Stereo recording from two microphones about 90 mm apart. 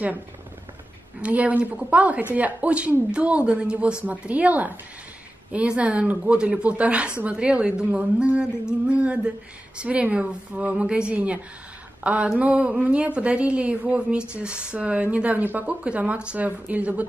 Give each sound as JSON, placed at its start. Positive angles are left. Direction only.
{"t": 1.2, "sound": "a woman's voice", "side_deg": -15}